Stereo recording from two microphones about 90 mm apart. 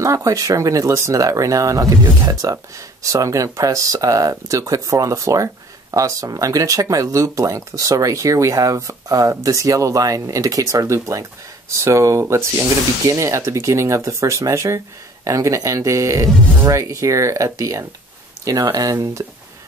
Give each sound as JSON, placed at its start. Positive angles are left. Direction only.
{"t": 0.0, "sound": "speech", "side_deg": -35}